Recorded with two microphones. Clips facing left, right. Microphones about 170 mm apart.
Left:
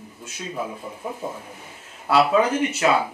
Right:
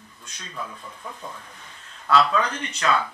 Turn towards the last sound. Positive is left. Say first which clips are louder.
# left 5 dB
turn(degrees=10)  # may be behind; listen again after turning